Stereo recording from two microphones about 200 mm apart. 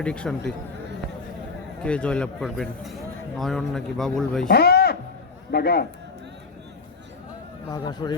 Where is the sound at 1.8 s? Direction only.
5° left (ahead or behind).